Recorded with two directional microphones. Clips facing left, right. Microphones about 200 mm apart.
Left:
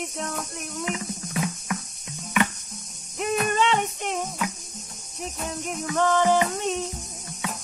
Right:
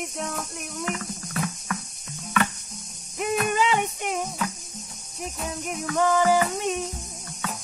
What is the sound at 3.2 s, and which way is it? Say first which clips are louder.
Music: even; 5° right (ahead or behind).